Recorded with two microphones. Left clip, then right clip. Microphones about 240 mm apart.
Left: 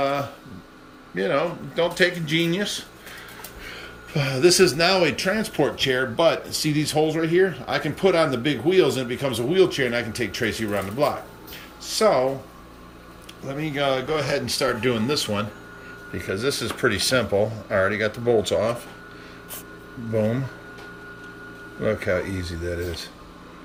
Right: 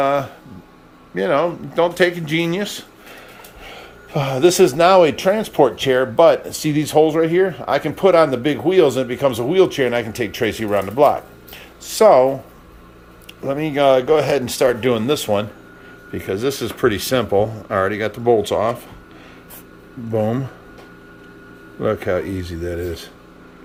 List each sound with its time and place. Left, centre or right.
0.0 s a sound: centre
1.1 s speech: centre
13.4 s speech: centre
21.8 s speech: centre